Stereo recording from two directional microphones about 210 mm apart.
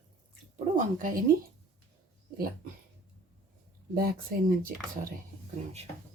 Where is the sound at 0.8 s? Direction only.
40° right (ahead or behind).